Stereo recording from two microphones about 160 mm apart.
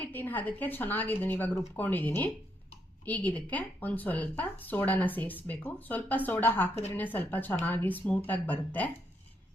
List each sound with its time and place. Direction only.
0.0 s speech: 10° left (ahead or behind)